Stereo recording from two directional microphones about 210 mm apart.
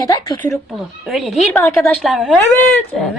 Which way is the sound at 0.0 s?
15° left (ahead or behind).